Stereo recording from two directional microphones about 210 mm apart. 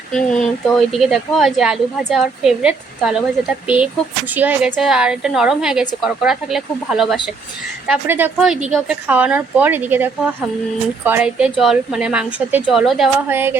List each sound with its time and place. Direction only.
0.1 s speech: 5° left (ahead or behind)
4.4 s speech: 5° right (ahead or behind)